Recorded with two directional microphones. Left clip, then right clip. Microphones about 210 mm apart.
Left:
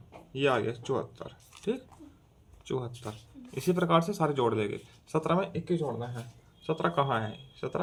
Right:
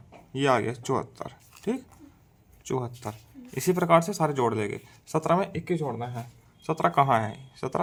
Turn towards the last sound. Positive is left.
turn(degrees=-35)  # may be behind; listen again after turning